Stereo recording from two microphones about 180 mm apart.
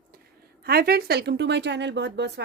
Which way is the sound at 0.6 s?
60° right (ahead or behind).